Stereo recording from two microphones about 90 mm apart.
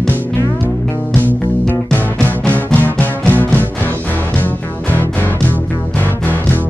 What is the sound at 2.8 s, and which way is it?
Music, 20° left (ahead or behind).